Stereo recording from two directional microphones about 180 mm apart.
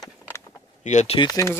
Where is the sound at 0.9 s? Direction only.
40° left (ahead or behind).